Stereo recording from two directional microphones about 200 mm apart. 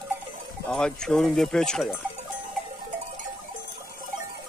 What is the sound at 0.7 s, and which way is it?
Speech, 5° left (ahead or behind).